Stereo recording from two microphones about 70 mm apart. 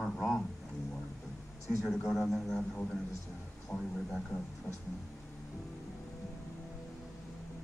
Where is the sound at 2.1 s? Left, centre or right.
Centre.